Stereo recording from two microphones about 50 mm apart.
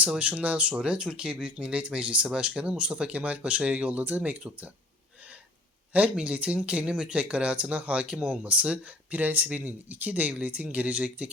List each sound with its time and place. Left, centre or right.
0.1 s speech: right
5.9 s speech: right